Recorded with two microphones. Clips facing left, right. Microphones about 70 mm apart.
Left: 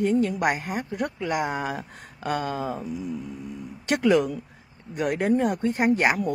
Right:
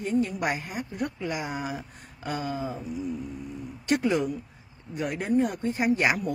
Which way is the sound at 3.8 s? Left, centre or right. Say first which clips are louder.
Left 4 dB; left.